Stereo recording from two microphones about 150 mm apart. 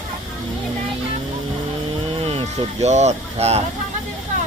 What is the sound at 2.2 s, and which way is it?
Speech, 40° right (ahead or behind).